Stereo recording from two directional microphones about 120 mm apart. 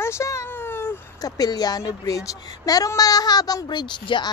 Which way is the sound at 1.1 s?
30° left (ahead or behind).